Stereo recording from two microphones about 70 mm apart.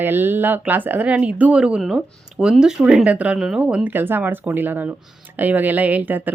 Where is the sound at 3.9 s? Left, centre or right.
Right.